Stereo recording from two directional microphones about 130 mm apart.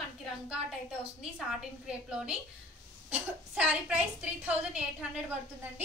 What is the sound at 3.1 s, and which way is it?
A woman's voice, 10° right (ahead or behind).